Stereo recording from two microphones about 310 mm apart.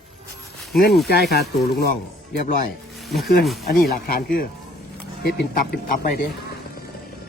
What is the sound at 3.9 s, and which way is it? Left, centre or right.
Speech, left.